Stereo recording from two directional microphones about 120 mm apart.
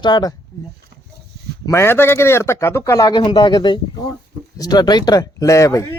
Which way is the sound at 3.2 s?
40° left (ahead or behind).